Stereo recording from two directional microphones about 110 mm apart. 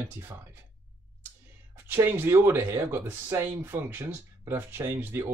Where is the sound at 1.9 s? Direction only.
20° right (ahead or behind).